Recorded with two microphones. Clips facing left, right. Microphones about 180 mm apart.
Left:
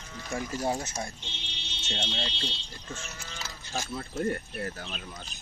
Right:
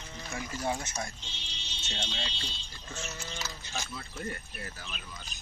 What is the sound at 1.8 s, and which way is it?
Speech, 70° left (ahead or behind).